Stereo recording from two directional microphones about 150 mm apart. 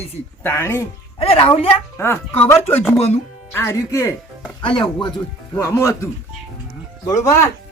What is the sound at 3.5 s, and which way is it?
Speech, 20° left (ahead or behind).